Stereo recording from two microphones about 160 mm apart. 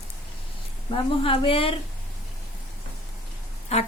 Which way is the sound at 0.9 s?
35° left (ahead or behind).